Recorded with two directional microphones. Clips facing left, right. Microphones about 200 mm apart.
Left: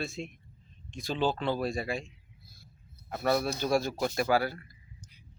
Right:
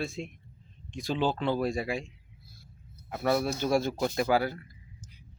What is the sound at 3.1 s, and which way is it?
Speech, centre (ahead or behind).